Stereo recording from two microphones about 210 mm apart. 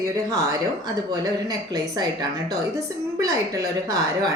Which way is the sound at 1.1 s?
15° right (ahead or behind).